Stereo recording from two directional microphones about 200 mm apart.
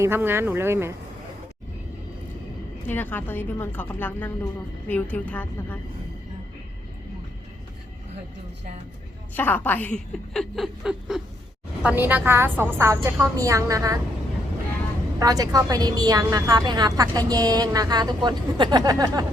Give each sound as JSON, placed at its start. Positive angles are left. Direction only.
{"t": 0.0, "sound": "a woman's voice", "side_deg": -10}
{"t": 2.8, "sound": "a woman's voice", "side_deg": 10}
{"t": 9.3, "sound": "a woman's voice", "side_deg": 10}
{"t": 15.2, "sound": "a woman's voice", "side_deg": -20}